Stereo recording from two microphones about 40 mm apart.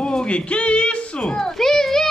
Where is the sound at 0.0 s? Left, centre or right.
Left.